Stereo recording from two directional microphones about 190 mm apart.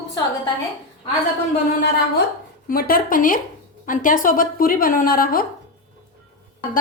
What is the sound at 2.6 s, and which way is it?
A woman's voice, 50° left (ahead or behind).